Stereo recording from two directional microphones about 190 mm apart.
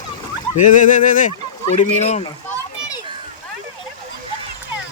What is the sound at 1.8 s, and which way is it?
Speech, 35° left (ahead or behind).